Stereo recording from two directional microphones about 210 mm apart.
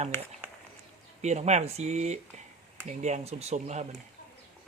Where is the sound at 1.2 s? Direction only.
30° right (ahead or behind).